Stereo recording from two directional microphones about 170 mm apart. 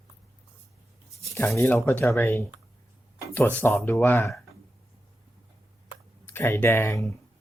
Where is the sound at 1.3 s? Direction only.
15° left (ahead or behind).